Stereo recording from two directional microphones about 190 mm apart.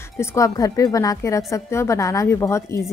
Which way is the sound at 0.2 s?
15° left (ahead or behind).